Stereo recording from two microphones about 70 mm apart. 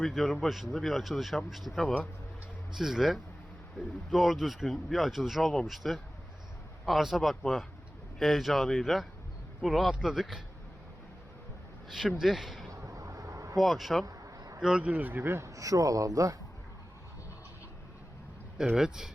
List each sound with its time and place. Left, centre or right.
0.0 s speech: centre
11.9 s speech: centre
12.7 s a sound: right
13.6 s speech: centre
14.0 s a sound: right
14.6 s speech: centre; by 15.4 s right
15.4 s speech: right
18.5 s speech: centre